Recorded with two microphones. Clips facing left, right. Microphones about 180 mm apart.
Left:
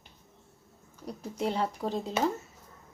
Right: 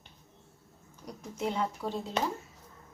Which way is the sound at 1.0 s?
35° left (ahead or behind).